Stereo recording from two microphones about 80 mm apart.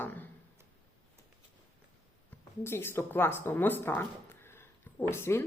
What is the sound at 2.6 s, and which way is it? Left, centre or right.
Speech, left.